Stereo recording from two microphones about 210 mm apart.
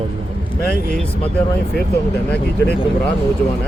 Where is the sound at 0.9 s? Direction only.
5° left (ahead or behind).